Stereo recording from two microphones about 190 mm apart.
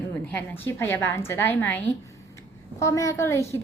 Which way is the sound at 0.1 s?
10° left (ahead or behind).